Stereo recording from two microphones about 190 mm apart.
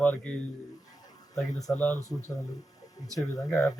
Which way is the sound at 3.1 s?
15° left (ahead or behind).